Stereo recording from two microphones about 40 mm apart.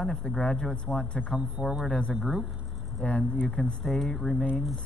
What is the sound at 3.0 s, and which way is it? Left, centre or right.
Speech, left.